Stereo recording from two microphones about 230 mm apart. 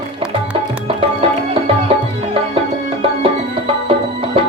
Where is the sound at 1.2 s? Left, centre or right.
Right.